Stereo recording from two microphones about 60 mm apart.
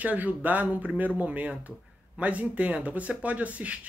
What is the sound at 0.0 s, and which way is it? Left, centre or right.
Speech, right.